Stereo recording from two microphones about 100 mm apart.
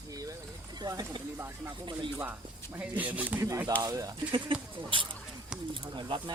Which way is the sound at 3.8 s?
35° right (ahead or behind).